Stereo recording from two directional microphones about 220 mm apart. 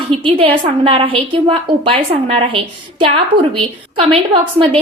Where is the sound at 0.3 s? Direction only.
25° right (ahead or behind).